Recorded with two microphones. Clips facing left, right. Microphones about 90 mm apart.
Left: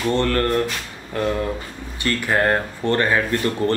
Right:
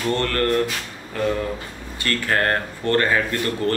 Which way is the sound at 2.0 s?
15° left (ahead or behind).